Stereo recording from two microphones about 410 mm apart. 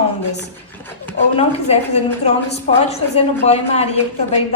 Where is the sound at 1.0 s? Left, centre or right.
Centre.